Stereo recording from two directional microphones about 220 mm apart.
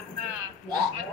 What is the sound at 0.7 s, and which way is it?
Speech, 20° right (ahead or behind).